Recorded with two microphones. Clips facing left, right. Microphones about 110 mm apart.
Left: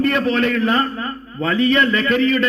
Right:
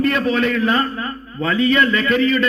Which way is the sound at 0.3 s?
45° left (ahead or behind).